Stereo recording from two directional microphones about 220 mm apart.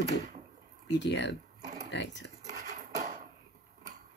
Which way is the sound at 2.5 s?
35° right (ahead or behind).